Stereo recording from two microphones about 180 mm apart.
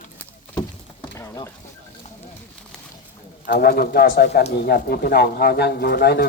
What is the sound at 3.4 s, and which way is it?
Speech, 55° left (ahead or behind).